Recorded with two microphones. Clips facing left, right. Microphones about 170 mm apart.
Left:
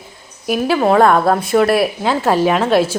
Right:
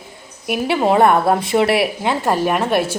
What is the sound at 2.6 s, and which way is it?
Speech, 15° right (ahead or behind).